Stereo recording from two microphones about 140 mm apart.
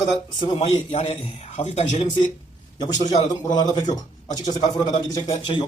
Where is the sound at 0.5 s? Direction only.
45° left (ahead or behind).